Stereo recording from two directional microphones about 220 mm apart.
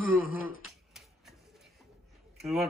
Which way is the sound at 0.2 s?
65° left (ahead or behind).